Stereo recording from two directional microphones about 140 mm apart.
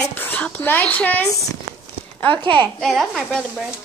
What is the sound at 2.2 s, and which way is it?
Speech, 35° right (ahead or behind).